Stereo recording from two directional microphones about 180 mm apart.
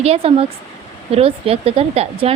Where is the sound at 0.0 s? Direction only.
35° right (ahead or behind).